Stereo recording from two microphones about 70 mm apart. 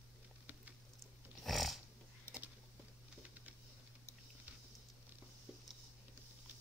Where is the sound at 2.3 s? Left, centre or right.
Left.